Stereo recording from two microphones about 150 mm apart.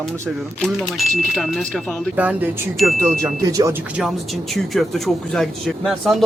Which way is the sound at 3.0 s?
20° right (ahead or behind).